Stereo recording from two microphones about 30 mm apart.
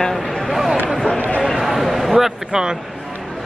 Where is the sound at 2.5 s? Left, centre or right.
Right.